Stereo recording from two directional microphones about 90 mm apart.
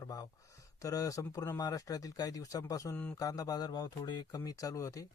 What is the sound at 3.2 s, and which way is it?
Speech, 40° left (ahead or behind).